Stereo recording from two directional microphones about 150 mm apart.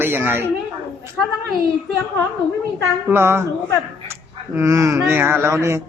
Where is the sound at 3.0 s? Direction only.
15° right (ahead or behind).